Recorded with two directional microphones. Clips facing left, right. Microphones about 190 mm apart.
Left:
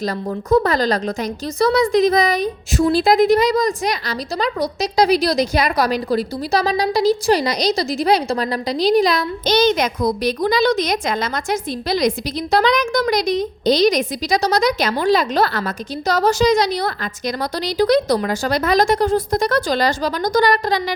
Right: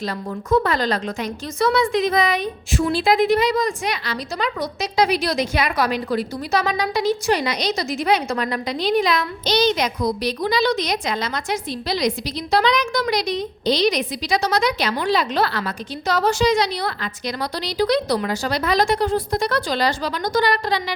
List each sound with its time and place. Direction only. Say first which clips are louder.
0.5 s a woman's voice: left 3 dB; 40° left (ahead or behind)